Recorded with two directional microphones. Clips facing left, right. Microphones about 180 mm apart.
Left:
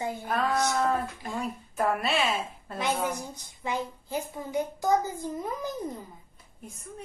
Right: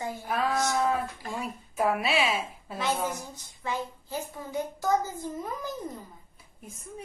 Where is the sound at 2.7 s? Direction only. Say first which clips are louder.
Left 1 dB; 15° left (ahead or behind).